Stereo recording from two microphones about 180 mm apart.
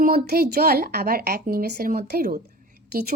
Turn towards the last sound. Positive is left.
turn(degrees=-60)  # may be behind; listen again after turning